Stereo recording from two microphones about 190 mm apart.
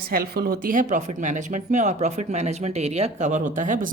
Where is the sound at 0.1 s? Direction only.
50° right (ahead or behind).